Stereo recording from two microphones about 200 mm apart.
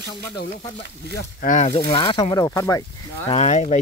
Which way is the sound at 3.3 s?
35° left (ahead or behind).